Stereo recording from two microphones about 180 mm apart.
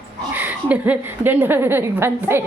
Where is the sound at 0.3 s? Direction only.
10° right (ahead or behind).